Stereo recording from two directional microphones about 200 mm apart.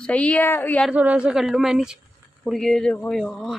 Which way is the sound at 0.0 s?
5° left (ahead or behind).